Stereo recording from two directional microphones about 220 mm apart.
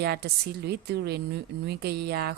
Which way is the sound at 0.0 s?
45° right (ahead or behind).